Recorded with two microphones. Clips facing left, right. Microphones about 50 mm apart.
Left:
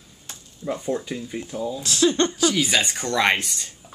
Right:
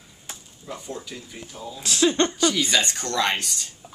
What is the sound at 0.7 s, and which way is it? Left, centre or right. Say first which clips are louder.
Speech: left 9 dB; left.